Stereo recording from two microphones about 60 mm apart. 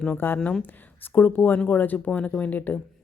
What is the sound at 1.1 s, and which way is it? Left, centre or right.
A woman's voice, left.